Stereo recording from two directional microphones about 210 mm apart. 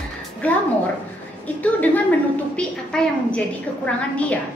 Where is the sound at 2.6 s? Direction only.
5° left (ahead or behind).